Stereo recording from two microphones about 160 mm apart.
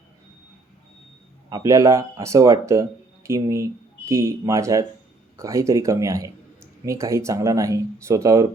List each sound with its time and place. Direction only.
1.5 s speech: 25° right (ahead or behind)